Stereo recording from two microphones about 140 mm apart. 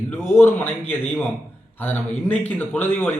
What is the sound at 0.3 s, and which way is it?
Speech, 15° left (ahead or behind).